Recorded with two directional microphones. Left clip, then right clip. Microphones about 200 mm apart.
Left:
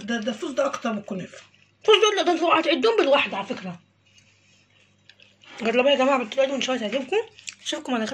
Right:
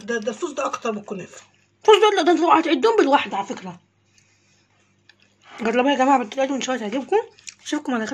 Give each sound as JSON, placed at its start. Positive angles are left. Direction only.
{"t": 0.0, "sound": "speech", "side_deg": -55}
{"t": 5.6, "sound": "speech", "side_deg": -55}